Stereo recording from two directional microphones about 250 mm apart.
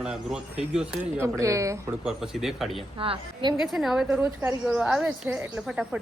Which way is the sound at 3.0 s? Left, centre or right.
Right.